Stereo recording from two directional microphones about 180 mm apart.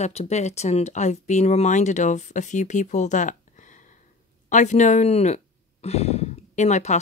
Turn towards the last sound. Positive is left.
turn(degrees=40)  # may be behind; listen again after turning